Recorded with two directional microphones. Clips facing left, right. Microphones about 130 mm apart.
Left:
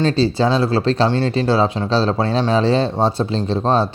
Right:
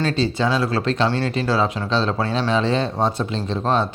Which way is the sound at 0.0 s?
30° left (ahead or behind).